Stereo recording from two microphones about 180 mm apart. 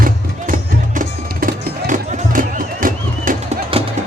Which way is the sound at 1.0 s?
45° right (ahead or behind).